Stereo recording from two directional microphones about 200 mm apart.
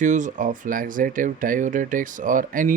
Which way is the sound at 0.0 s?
40° right (ahead or behind).